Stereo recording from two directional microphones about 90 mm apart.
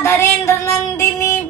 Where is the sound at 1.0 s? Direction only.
35° left (ahead or behind).